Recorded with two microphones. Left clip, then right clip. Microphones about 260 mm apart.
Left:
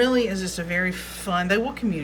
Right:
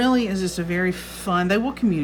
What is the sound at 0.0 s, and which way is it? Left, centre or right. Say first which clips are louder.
Speech: even; centre.